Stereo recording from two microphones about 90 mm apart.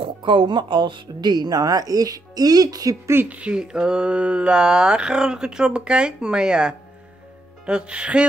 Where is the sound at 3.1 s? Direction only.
25° right (ahead or behind).